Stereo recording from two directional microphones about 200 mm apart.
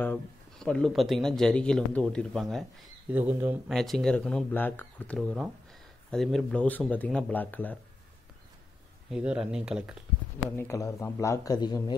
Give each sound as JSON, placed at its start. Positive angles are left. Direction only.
{"t": 0.0, "sound": "speech", "side_deg": 5}
{"t": 3.1, "sound": "speech", "side_deg": -10}
{"t": 9.1, "sound": "speech", "side_deg": -5}
{"t": 10.5, "sound": "speech", "side_deg": 10}